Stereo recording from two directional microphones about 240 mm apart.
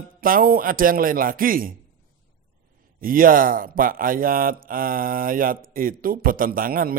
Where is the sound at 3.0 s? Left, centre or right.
Right.